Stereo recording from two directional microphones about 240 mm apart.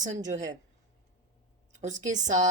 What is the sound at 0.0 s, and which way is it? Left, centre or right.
Speech, right.